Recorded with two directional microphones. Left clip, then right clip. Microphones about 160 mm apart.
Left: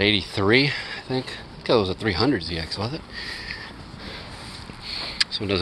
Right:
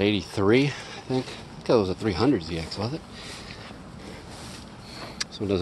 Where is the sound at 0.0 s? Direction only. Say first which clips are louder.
Left 3 dB; centre (ahead or behind).